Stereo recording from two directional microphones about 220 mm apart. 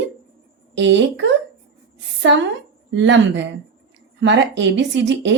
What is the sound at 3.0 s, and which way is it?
A woman's voice, 55° right (ahead or behind).